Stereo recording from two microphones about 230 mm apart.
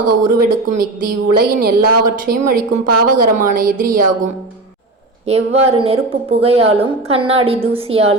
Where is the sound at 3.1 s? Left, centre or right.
Right.